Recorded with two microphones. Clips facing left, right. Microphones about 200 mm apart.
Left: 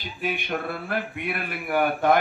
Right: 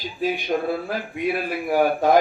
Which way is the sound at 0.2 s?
60° left (ahead or behind).